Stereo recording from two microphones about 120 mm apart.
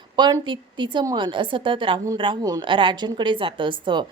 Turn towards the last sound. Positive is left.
turn(degrees=-40)  # may be behind; listen again after turning